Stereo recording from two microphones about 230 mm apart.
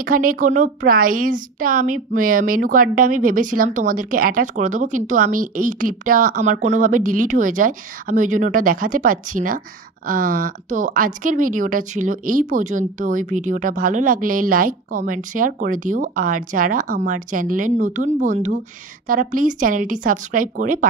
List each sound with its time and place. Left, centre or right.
0.0 s a woman's voice: right